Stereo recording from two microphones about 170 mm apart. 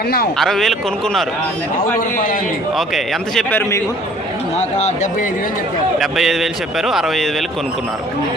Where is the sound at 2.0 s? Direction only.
55° left (ahead or behind).